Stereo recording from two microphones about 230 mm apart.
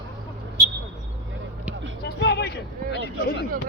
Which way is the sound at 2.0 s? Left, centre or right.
Left.